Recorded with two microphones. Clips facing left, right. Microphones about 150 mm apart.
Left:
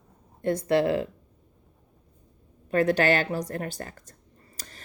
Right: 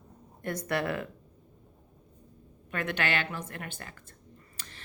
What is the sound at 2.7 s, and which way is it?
Speech, 35° left (ahead or behind).